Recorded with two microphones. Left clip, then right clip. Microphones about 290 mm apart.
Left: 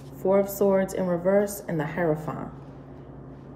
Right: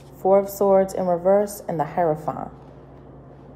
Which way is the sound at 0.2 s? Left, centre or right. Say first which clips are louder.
Right 4 dB; centre.